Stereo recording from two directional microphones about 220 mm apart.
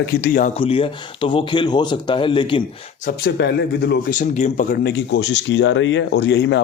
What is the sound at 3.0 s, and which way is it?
Speech, 45° left (ahead or behind).